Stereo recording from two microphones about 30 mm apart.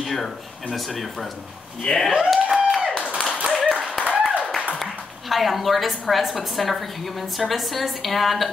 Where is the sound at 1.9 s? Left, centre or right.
Left.